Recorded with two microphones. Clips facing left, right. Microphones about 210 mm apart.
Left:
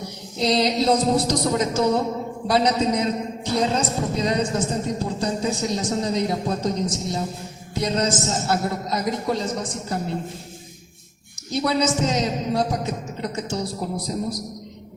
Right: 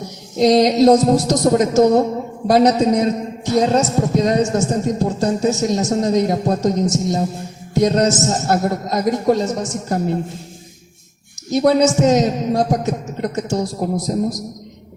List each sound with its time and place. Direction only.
0.3 s a man's voice: 45° right (ahead or behind)
11.5 s a man's voice: 45° right (ahead or behind)